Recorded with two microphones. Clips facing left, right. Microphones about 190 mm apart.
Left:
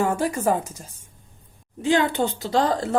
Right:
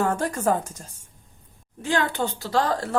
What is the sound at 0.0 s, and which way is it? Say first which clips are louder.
Speech: left 1 dB; 10° left (ahead or behind).